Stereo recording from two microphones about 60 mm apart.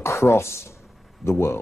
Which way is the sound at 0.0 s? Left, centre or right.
Left.